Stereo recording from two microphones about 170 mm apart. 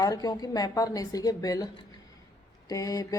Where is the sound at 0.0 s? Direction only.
20° left (ahead or behind).